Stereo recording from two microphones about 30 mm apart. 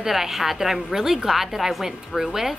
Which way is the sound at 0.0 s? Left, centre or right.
Centre.